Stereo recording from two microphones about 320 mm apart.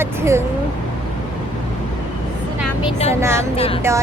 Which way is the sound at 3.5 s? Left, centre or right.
Centre.